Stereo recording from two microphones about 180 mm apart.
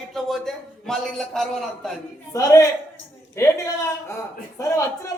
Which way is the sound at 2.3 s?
15° left (ahead or behind).